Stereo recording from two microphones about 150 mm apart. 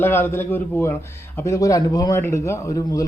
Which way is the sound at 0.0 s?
15° left (ahead or behind).